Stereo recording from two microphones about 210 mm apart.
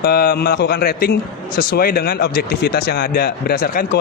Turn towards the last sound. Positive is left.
turn(degrees=45)  # may be behind; listen again after turning